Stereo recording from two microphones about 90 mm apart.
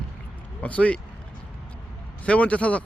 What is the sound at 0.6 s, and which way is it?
Speech, 15° left (ahead or behind).